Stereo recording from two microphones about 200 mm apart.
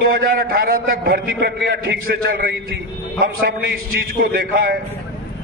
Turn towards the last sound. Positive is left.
turn(degrees=-50)  # may be behind; listen again after turning